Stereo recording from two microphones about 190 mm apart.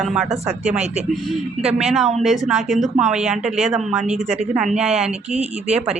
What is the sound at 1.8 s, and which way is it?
A woman's voice, centre (ahead or behind).